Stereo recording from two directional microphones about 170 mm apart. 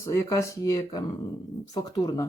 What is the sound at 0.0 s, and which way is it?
Speech, 20° left (ahead or behind).